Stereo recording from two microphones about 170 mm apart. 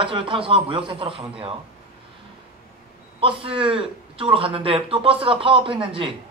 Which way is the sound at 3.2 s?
30° right (ahead or behind).